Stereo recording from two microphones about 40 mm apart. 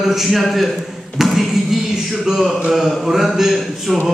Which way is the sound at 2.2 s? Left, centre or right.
Centre.